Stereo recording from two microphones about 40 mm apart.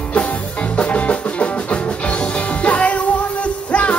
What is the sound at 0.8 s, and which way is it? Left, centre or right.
Music, left.